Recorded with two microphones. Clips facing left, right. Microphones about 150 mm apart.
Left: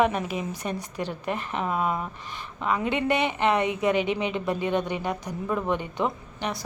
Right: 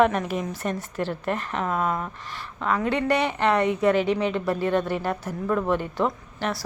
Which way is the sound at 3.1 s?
20° left (ahead or behind).